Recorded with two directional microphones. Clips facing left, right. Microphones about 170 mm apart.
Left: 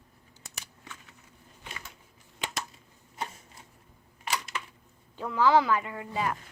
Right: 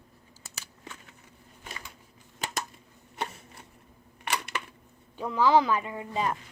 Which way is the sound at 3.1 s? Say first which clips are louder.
Right 2 dB; 70° right (ahead or behind).